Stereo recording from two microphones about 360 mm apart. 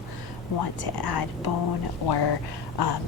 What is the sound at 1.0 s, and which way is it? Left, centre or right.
Speech, left.